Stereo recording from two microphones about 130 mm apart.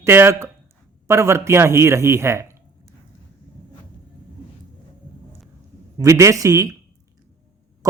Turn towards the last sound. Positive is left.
turn(degrees=-25)  # may be behind; listen again after turning